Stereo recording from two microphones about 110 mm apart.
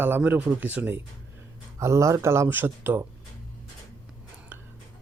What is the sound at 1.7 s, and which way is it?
Speech, 25° right (ahead or behind).